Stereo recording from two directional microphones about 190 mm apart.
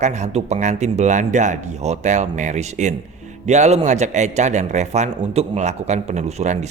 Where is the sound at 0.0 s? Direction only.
40° right (ahead or behind).